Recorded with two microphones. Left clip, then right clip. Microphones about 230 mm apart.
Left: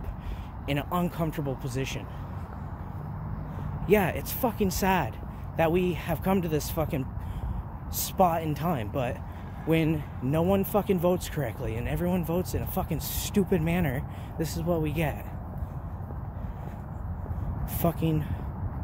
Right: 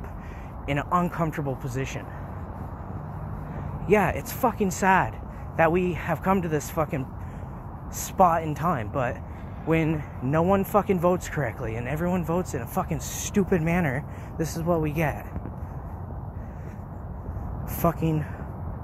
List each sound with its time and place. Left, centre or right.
0.7 s speech: centre
3.8 s speech: centre
8.2 s speech: centre
17.7 s speech: centre